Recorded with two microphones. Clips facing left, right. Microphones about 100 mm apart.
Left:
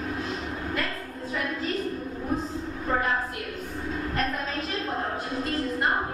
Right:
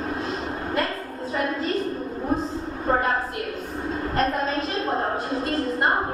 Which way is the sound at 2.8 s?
40° right (ahead or behind).